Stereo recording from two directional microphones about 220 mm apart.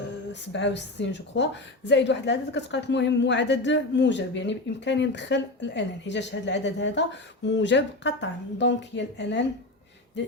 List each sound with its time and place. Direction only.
0.3 s a woman's voice: 55° left (ahead or behind)